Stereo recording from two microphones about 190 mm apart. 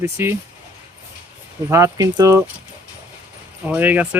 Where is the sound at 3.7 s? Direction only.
10° right (ahead or behind).